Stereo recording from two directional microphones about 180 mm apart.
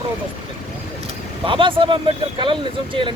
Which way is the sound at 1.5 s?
30° right (ahead or behind).